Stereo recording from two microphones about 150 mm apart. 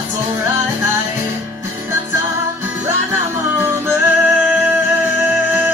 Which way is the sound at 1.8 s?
15° right (ahead or behind).